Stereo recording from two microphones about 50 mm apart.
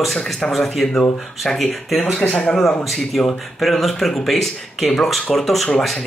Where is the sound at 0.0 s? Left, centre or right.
Centre.